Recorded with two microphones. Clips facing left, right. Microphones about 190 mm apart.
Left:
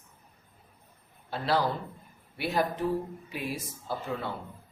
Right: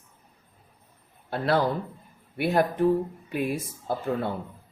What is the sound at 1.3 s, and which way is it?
Speech, 55° right (ahead or behind).